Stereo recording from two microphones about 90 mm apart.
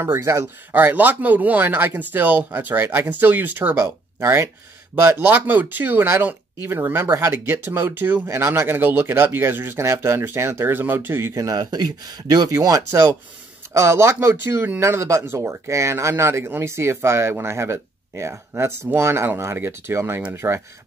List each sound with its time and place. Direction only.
0.0 s speech: 30° right (ahead or behind)
3.8 s speech: 30° right (ahead or behind)
11.3 s speech: 45° right (ahead or behind); by 20.6 s 25° right (ahead or behind)